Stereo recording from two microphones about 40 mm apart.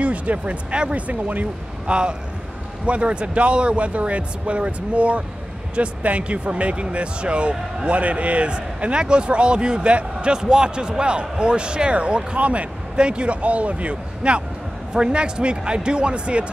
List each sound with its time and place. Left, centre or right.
0.0 s speech: right
1.0 s speech: right
1.9 s speech: right
12.9 s speech: right